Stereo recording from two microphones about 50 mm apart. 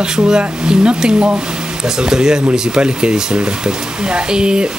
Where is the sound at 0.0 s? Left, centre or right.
Centre.